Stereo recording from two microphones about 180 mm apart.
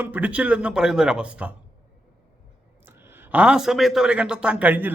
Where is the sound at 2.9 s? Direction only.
10° right (ahead or behind).